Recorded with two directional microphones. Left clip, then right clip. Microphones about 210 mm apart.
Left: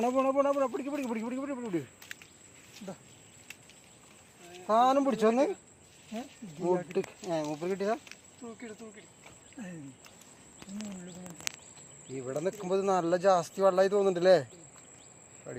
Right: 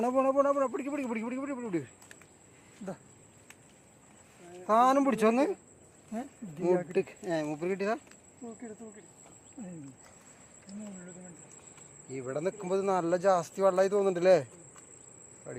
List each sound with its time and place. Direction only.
0.0 s speech: centre (ahead or behind)
4.6 s speech: 20° right (ahead or behind)
6.6 s speech: 20° right (ahead or behind)
9.6 s speech: 15° left (ahead or behind)
12.1 s speech: 5° left (ahead or behind)
15.5 s speech: 5° left (ahead or behind)